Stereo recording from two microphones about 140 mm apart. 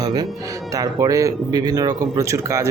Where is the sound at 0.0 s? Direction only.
30° right (ahead or behind).